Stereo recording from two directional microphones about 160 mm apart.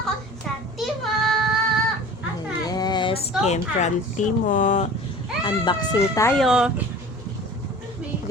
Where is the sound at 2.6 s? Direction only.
25° left (ahead or behind).